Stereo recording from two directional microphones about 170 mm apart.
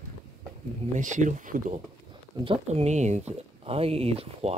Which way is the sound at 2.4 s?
40° right (ahead or behind).